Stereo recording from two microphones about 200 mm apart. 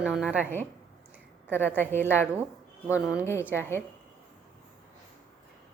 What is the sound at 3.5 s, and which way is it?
Speech, 10° left (ahead or behind).